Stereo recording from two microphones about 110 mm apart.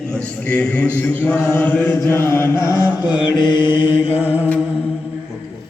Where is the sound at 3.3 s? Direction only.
45° left (ahead or behind).